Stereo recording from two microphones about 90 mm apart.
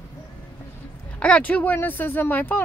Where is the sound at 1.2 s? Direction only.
15° left (ahead or behind).